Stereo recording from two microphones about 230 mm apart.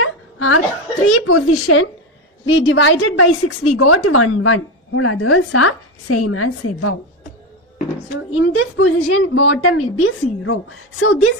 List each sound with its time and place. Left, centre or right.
0.0 s hiccup: left
1.1 s a woman's voice: left
8.3 s a woman's voice: left